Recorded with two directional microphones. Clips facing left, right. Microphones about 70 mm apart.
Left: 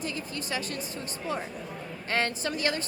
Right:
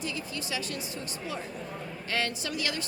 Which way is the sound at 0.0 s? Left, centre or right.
Left.